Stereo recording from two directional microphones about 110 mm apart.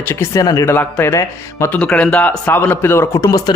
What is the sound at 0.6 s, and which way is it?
A man's voice, 20° left (ahead or behind).